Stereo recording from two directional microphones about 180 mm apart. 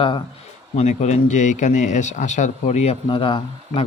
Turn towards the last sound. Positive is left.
turn(degrees=30)  # may be behind; listen again after turning